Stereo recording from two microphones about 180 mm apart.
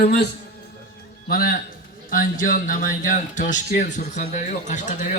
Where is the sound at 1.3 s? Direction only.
55° left (ahead or behind).